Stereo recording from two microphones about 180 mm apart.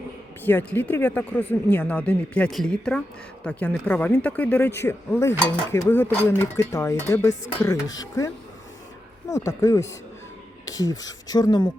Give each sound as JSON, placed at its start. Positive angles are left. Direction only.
{"t": 0.4, "sound": "speech", "side_deg": 10}
{"t": 9.3, "sound": "speech", "side_deg": 15}